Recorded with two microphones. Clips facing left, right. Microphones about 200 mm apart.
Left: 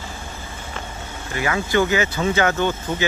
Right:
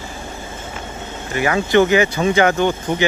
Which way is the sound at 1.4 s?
20° right (ahead or behind).